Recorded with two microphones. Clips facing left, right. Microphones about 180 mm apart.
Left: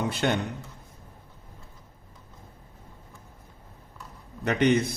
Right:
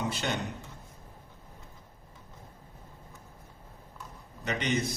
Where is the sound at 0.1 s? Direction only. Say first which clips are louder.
Left 7 dB; 55° left (ahead or behind).